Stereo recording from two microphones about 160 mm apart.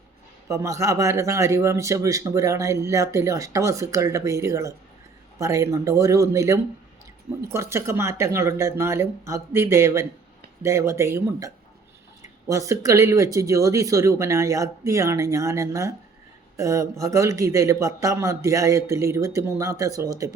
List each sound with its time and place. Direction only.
0.4 s speech: 20° right (ahead or behind)